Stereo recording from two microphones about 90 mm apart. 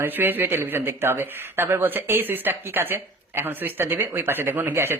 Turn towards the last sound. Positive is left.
turn(degrees=-25)  # may be behind; listen again after turning